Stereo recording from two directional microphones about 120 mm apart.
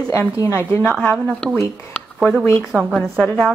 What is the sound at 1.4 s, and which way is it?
Speech, 10° left (ahead or behind).